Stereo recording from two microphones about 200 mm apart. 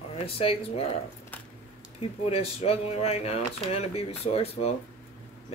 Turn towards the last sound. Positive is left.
turn(degrees=30)  # may be behind; listen again after turning